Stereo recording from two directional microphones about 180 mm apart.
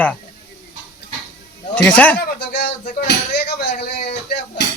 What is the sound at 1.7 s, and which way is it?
Speech, 10° left (ahead or behind).